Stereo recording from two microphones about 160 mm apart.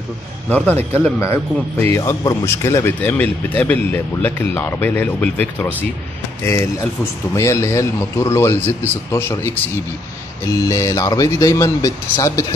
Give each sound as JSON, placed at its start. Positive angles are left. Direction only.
{"t": 0.5, "sound": "speech", "side_deg": 10}
{"t": 10.6, "sound": "speech", "side_deg": 20}